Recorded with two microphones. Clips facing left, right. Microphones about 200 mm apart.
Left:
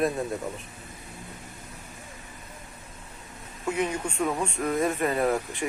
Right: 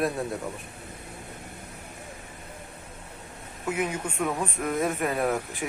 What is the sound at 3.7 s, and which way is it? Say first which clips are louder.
Speech: left 1 dB; 5° right (ahead or behind).